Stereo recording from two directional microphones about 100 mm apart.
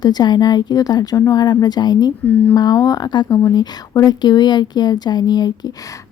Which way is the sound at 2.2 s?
15° left (ahead or behind).